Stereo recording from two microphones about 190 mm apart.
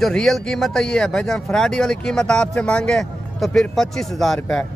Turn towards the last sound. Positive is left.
turn(degrees=5)  # may be behind; listen again after turning